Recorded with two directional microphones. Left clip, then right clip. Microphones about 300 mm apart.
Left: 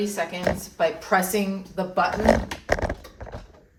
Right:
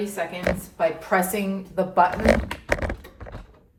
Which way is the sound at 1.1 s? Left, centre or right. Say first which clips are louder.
Even; centre.